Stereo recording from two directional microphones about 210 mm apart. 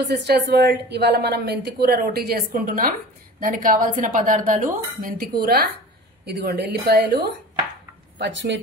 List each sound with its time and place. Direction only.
0.1 s a woman's voice: 55° right (ahead or behind)
8.2 s speech: 60° right (ahead or behind)